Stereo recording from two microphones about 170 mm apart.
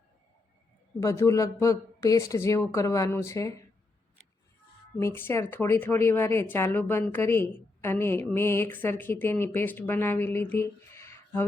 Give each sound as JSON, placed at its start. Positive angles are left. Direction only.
{"t": 0.9, "sound": "speech", "side_deg": 15}
{"t": 4.9, "sound": "speech", "side_deg": 15}